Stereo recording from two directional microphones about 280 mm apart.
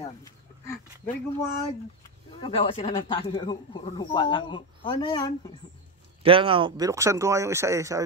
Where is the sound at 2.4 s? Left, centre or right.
Centre.